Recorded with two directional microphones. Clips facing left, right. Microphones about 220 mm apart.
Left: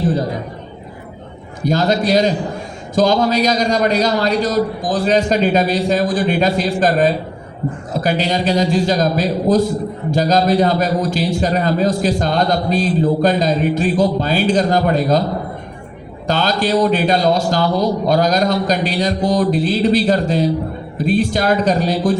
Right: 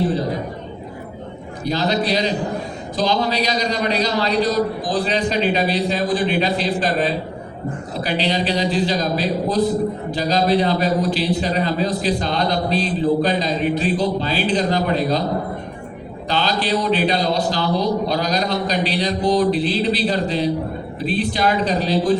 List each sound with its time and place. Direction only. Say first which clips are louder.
1.6 s a man's voice: left 4 dB; 45° left (ahead or behind)
16.2 s a man's voice: left 4 dB; 45° left (ahead or behind)